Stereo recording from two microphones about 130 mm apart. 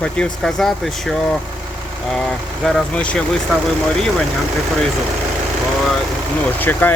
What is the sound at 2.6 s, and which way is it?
Speech, 5° left (ahead or behind).